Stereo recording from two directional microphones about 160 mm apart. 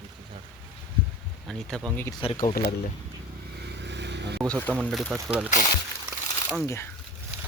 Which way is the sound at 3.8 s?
90° right.